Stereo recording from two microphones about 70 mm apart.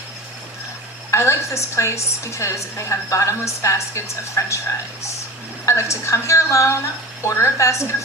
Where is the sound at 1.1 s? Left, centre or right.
Left.